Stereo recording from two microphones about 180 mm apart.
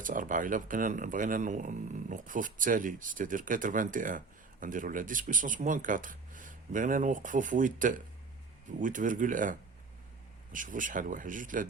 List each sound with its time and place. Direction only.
0.0 s speech: 45° right (ahead or behind)